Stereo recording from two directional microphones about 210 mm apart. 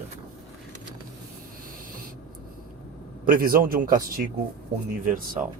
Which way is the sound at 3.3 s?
45° right (ahead or behind).